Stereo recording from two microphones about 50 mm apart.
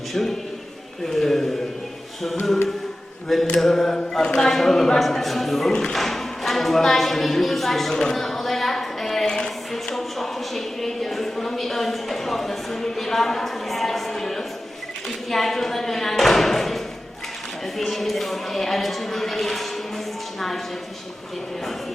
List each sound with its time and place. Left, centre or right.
1.1 s mantra: centre
3.5 s mantra: centre
4.4 s speech: centre
5.9 s a sound: centre
9.2 s music: centre
9.7 s a sound: centre
15.3 s speech: centre